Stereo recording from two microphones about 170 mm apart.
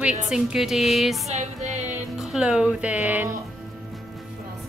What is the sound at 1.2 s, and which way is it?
Music, 40° right (ahead or behind).